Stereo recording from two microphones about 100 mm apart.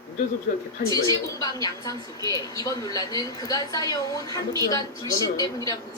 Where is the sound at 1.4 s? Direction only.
40° left (ahead or behind).